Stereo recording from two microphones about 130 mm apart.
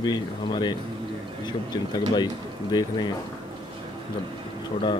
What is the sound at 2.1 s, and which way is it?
Speech, 35° left (ahead or behind).